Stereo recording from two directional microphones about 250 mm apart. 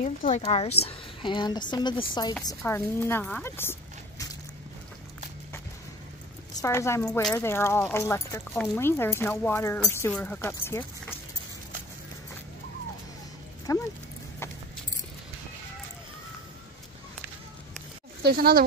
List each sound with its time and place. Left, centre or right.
0.0 s speech: left; by 3.7 s centre
6.6 s speech: centre
13.7 s speech: centre
18.2 s speech: right